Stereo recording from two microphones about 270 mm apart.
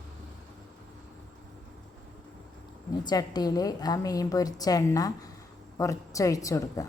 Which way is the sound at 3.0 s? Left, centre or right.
Centre.